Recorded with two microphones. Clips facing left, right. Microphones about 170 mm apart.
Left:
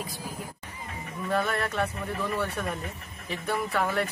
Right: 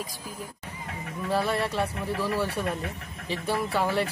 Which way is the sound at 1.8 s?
5° right (ahead or behind).